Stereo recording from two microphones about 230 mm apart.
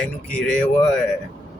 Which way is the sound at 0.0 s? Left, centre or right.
Centre.